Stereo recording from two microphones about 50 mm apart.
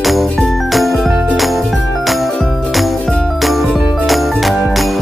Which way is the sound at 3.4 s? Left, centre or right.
Centre.